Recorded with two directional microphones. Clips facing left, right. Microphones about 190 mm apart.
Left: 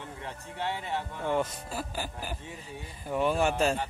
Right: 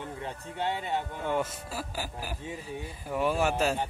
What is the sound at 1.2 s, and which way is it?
Speech, 5° right (ahead or behind).